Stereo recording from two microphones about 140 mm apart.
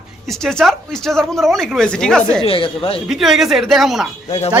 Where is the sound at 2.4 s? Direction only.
40° left (ahead or behind).